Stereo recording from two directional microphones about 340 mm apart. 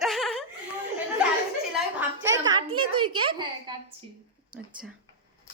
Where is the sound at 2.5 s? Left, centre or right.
Centre.